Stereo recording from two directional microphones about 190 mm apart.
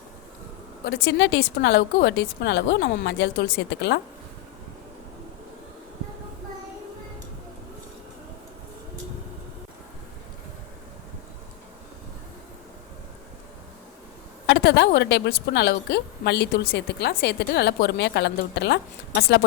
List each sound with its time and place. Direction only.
0.9 s a woman's voice: 60° left (ahead or behind)
14.4 s a woman's voice: 65° left (ahead or behind)